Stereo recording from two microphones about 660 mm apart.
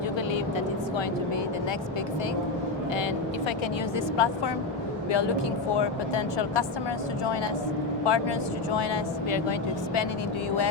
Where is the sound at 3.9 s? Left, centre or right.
Left.